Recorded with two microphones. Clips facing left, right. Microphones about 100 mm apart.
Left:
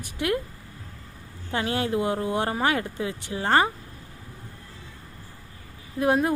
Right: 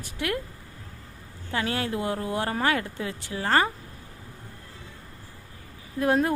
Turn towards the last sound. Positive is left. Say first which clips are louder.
# left 1 dB
turn(degrees=20)  # may be behind; listen again after turning